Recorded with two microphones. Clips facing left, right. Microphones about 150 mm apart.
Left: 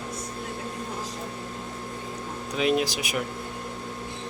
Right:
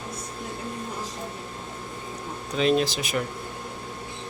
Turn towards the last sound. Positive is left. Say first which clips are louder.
# right 2 dB
turn(degrees=10)  # may be behind; listen again after turning